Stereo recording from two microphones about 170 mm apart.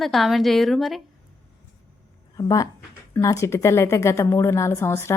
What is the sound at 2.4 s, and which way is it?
A woman's voice, 20° left (ahead or behind).